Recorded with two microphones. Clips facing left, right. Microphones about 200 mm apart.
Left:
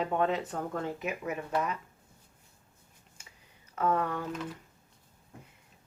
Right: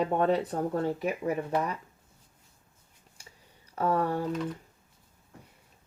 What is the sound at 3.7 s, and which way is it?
Speech, 35° right (ahead or behind).